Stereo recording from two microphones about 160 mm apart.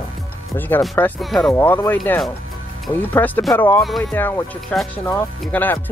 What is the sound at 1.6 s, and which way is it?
Speech, 15° left (ahead or behind).